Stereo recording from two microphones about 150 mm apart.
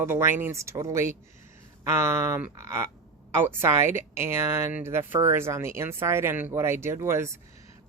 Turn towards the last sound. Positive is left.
turn(degrees=-20)  # may be behind; listen again after turning